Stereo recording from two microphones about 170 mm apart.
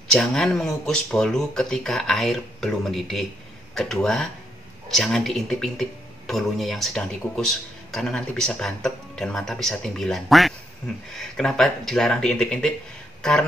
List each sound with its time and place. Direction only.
0.1 s speech: 5° left (ahead or behind)